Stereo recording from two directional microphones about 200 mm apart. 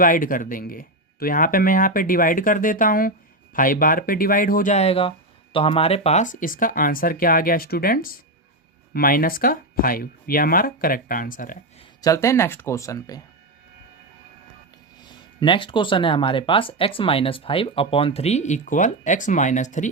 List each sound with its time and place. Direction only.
0.0 s speech: 45° left (ahead or behind)
12.0 s speech: 15° left (ahead or behind)
15.0 s speech: 20° left (ahead or behind); by 19.9 s 40° left (ahead or behind)